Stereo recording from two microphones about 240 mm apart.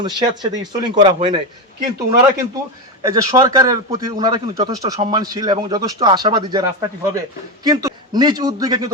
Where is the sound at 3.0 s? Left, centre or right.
Centre.